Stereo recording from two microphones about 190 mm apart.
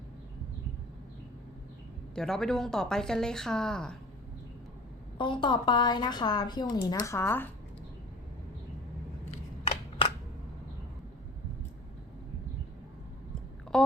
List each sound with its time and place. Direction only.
2.1 s speech: 5° left (ahead or behind)
5.1 s a woman's voice: 25° left (ahead or behind)
13.7 s a sound: 5° left (ahead or behind)